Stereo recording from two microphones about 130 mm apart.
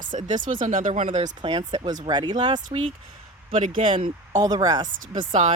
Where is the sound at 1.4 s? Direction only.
40° right (ahead or behind).